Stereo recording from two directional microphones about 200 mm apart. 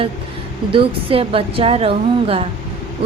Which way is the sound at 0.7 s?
25° right (ahead or behind).